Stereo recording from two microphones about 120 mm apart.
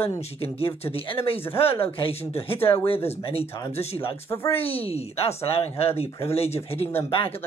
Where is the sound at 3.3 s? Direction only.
55° left (ahead or behind).